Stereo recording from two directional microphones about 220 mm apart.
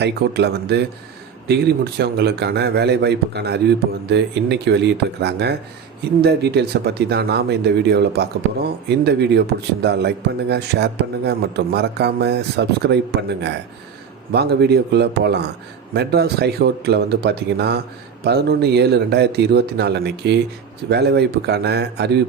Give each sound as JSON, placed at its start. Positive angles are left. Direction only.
{"t": 0.0, "sound": "a man's voice", "side_deg": -50}